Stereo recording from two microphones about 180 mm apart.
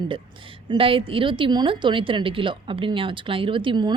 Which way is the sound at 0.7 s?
30° right (ahead or behind).